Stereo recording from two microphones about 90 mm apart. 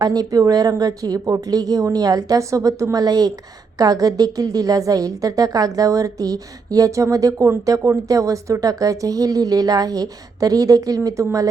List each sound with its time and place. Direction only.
0.0 s a woman's voice: 45° right (ahead or behind)